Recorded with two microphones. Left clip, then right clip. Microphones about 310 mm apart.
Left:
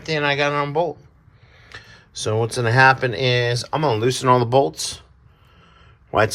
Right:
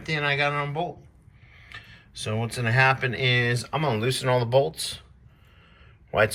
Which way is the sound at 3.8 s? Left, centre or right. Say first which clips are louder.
Left 8 dB; left.